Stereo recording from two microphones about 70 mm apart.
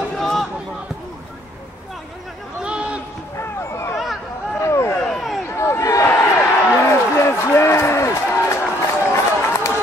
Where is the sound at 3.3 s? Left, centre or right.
Left.